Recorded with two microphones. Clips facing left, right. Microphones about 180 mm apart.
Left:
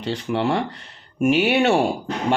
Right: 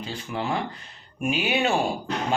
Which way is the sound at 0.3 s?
75° left (ahead or behind).